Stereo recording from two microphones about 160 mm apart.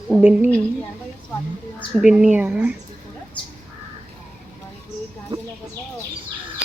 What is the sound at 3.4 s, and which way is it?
Crow, 30° left (ahead or behind).